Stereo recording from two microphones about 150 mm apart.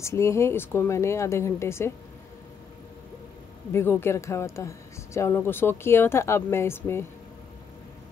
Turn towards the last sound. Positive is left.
turn(degrees=15)  # may be behind; listen again after turning